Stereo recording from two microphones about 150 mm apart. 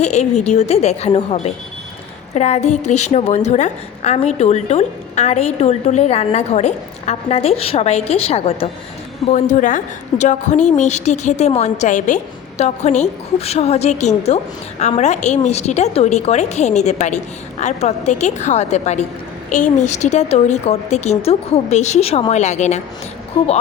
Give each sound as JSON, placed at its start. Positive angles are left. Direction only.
{"t": 0.0, "sound": "a woman's voice", "side_deg": 50}
{"t": 9.2, "sound": "a woman's voice", "side_deg": 50}